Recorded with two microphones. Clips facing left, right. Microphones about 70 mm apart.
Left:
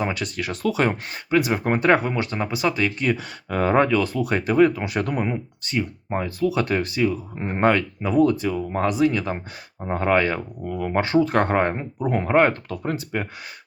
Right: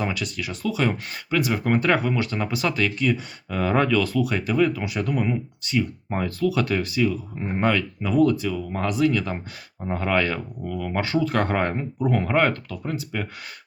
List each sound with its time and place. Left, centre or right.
0.1 s speech: left
0.9 s speech: left
3.5 s speech: left
5.2 s speech: left
6.1 s speech: centre
6.5 s speech: left
7.3 s speech: left
12.6 s speech: left